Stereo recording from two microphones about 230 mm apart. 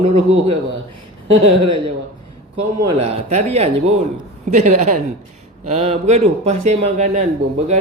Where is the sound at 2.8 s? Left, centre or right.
Right.